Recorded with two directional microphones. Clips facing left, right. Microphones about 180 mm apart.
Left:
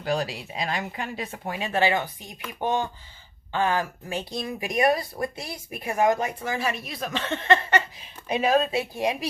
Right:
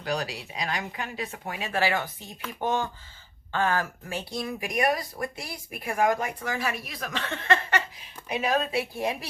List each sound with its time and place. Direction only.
0.0 s speech: 30° left (ahead or behind)